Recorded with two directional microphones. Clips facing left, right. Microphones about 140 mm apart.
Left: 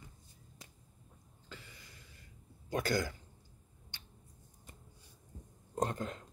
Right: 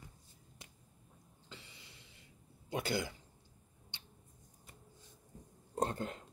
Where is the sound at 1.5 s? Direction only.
25° right (ahead or behind).